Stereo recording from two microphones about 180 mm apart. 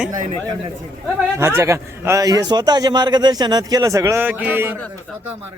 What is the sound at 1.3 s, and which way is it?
A man's voice, 15° right (ahead or behind).